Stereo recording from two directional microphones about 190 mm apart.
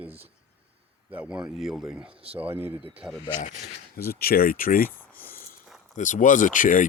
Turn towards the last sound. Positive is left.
turn(degrees=45)  # may be behind; listen again after turning